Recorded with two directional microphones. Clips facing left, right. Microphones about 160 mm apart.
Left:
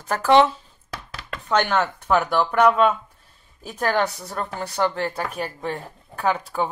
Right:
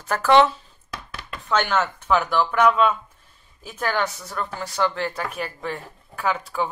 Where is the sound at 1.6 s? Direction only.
35° left (ahead or behind).